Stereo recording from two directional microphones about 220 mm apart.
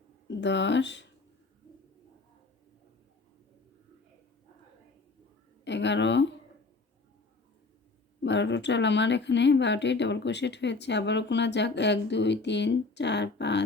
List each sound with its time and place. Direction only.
0.3 s speech: 55° left (ahead or behind)
5.6 s speech: 55° left (ahead or behind)
8.2 s speech: 55° left (ahead or behind)